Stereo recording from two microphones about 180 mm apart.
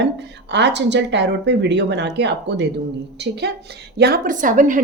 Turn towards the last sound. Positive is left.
turn(degrees=-45)  # may be behind; listen again after turning